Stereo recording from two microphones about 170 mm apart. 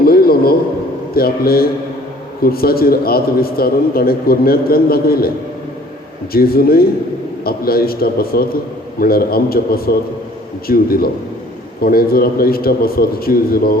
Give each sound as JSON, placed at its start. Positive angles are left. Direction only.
{"t": 0.0, "sound": "a sound", "side_deg": 60}
{"t": 1.1, "sound": "a man's voice", "side_deg": 65}
{"t": 6.3, "sound": "a man's voice", "side_deg": 60}